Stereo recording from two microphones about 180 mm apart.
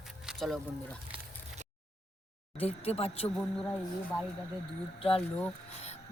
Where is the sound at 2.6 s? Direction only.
35° left (ahead or behind).